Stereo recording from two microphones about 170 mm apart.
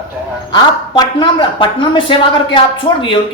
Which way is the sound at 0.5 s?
25° left (ahead or behind).